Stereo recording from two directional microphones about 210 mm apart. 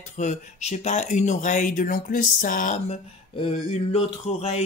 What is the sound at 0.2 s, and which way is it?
Speech, 35° left (ahead or behind).